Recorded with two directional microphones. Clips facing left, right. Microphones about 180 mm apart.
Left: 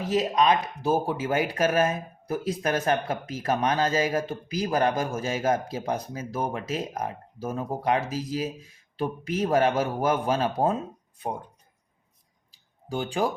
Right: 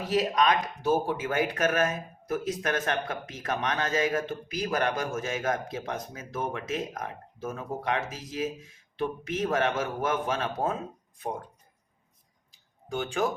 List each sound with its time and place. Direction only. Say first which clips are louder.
0.1 s speech: left 2 dB; 25° left (ahead or behind)
9.5 s speech: left 6 dB; 35° left (ahead or behind)
12.5 s a sound: left 2 dB; 35° left (ahead or behind)